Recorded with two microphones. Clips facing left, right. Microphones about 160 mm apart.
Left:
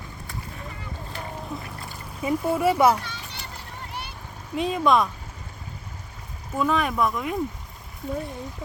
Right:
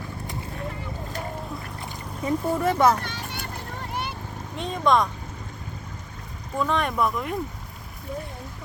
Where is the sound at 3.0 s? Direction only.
55° right (ahead or behind).